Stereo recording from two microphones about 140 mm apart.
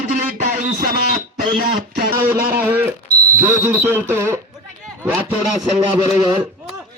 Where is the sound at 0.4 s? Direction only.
70° right (ahead or behind).